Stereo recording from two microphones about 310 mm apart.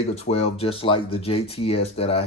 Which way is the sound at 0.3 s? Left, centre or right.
Centre.